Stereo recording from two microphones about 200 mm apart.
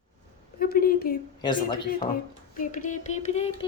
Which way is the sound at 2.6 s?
40° left (ahead or behind).